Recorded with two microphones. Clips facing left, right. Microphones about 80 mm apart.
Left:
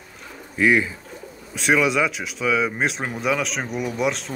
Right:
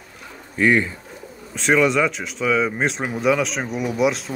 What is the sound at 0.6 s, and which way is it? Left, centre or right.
Speech, centre.